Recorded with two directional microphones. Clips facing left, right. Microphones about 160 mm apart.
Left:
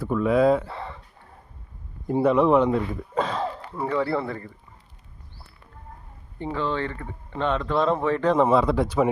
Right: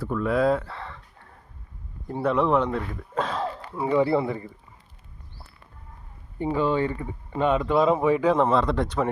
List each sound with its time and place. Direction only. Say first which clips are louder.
0.0 s speech: left 3 dB; 5° left (ahead or behind)
0.7 s a sound: left 3 dB; 10° left (ahead or behind)
2.0 s speech: left 4 dB; 5° left (ahead or behind)
3.8 s speech: right 4 dB; 15° right (ahead or behind)
6.4 s speech: right 4 dB; 10° right (ahead or behind)
8.4 s speech: left 2 dB; 5° left (ahead or behind)